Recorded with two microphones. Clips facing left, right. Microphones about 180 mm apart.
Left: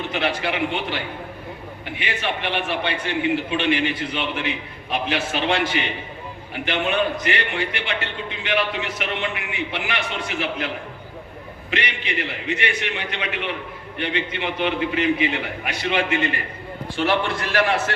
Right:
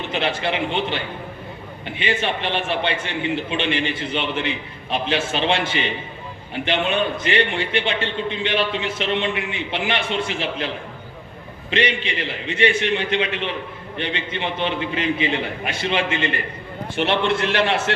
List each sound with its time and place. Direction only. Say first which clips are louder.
0.1 s a man's voice: right 3 dB; 25° right (ahead or behind)
11.7 s a man's voice: right 5 dB; 30° right (ahead or behind)